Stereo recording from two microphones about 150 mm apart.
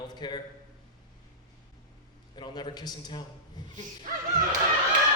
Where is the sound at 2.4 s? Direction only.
30° left (ahead or behind).